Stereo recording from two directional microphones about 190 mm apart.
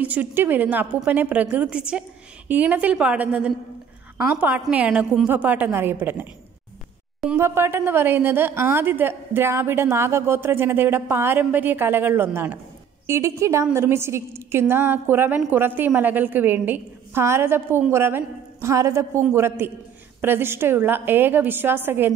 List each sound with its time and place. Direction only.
0.0 s a woman's voice: 10° right (ahead or behind)
7.3 s a woman's voice: 10° right (ahead or behind)